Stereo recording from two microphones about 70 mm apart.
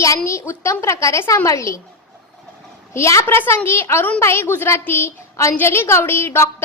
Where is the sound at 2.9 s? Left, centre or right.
Left.